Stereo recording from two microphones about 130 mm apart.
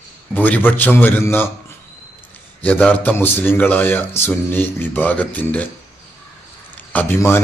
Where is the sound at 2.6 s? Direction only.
10° left (ahead or behind).